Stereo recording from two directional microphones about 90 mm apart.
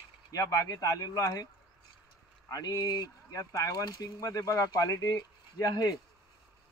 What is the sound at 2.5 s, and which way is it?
Speech, 40° left (ahead or behind).